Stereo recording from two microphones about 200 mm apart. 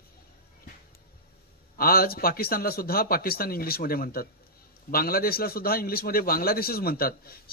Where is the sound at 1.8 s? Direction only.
50° left (ahead or behind).